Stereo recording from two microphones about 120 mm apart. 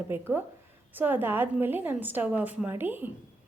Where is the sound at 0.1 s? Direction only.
20° right (ahead or behind).